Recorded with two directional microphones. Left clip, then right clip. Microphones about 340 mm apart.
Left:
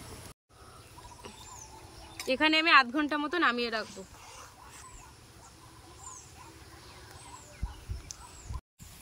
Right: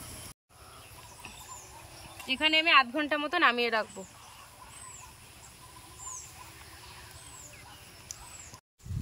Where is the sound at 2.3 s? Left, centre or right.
Centre.